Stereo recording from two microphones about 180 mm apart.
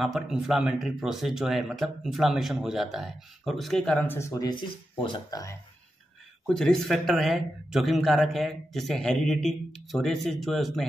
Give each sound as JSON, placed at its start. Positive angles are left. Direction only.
{"t": 0.0, "sound": "speech", "side_deg": 0}
{"t": 6.4, "sound": "speech", "side_deg": 5}